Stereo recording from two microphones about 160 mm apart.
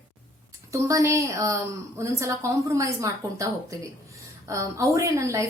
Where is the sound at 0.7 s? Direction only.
20° right (ahead or behind).